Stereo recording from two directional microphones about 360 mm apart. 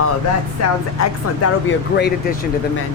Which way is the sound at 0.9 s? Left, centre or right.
Left.